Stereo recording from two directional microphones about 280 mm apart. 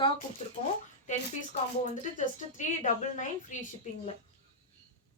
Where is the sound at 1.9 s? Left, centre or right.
Left.